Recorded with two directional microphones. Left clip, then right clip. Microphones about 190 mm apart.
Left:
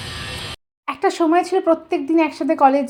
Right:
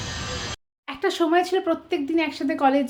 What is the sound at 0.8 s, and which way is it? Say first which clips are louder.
Speech: left 5 dB; 15° left (ahead or behind).